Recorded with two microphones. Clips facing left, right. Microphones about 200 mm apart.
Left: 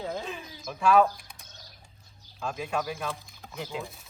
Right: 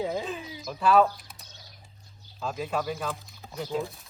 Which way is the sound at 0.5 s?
5° right (ahead or behind).